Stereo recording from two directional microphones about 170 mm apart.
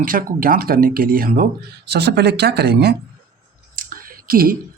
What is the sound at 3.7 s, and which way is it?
Clicking, 55° right (ahead or behind).